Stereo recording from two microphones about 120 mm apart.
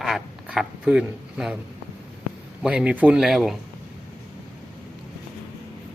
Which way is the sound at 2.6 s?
10° right (ahead or behind).